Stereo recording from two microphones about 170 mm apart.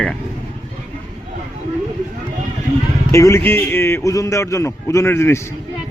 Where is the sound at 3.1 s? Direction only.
15° left (ahead or behind).